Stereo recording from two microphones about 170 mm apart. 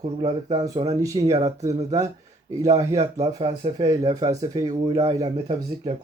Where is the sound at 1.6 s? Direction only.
20° right (ahead or behind).